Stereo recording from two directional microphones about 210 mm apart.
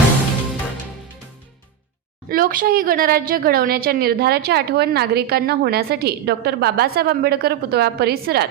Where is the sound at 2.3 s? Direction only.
40° right (ahead or behind).